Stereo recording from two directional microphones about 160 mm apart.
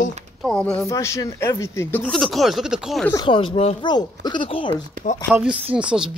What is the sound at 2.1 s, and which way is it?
Speech, 5° left (ahead or behind).